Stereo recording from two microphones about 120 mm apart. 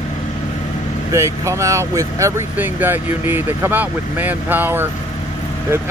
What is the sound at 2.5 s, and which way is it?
Speech, 15° right (ahead or behind).